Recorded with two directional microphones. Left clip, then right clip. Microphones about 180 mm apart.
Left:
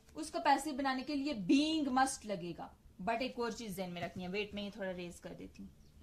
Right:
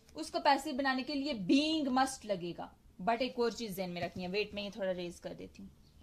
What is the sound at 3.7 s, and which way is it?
A woman's voice, 30° right (ahead or behind).